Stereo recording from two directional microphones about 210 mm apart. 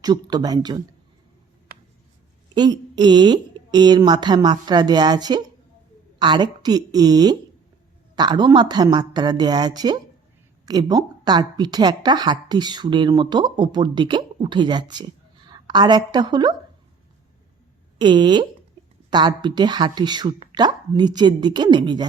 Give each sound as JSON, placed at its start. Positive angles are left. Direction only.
{"t": 0.0, "sound": "a woman's voice", "side_deg": -20}
{"t": 2.6, "sound": "a woman's voice", "side_deg": -20}
{"t": 18.0, "sound": "a woman's voice", "side_deg": -20}